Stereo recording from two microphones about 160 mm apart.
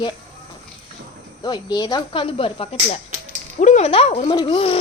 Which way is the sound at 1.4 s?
25° left (ahead or behind).